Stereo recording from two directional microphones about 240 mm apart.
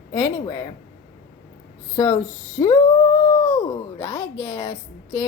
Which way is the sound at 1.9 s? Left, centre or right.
Centre.